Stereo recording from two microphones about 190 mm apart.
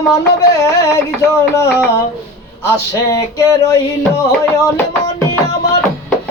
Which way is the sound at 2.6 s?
15° left (ahead or behind).